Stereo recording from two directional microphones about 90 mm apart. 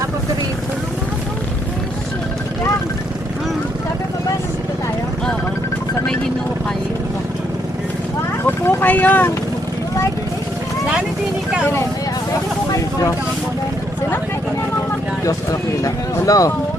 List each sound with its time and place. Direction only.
8.4 s vehicle: 20° left (ahead or behind)
11.6 s vehicle: 30° left (ahead or behind)
15.8 s speech: 40° left (ahead or behind)